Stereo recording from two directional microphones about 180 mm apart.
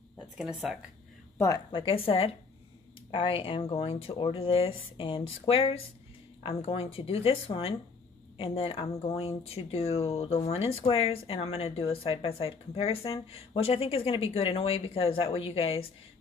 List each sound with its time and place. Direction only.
0.4 s speech: 5° right (ahead or behind)
1.7 s speech: 30° left (ahead or behind)